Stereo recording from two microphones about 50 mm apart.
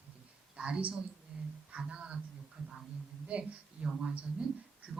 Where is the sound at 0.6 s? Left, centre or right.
Centre.